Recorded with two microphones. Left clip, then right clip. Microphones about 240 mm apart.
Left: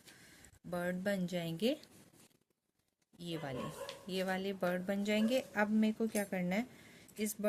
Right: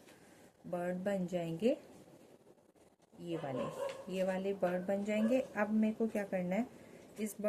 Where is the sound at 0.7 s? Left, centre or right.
Left.